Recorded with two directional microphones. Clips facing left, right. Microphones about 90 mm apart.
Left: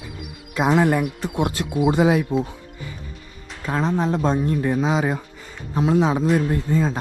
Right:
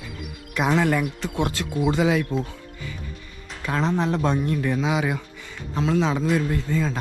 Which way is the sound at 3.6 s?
45° left (ahead or behind).